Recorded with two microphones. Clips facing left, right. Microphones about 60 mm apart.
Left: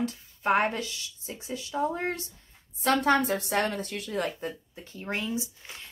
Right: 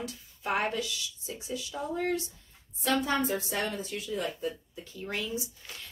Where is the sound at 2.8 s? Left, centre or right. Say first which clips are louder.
Left 5 dB; left.